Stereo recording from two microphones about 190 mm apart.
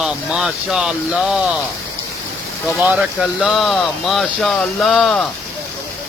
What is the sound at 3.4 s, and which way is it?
Speech, centre (ahead or behind).